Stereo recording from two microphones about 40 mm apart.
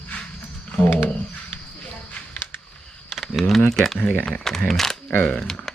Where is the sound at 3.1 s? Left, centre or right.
Centre.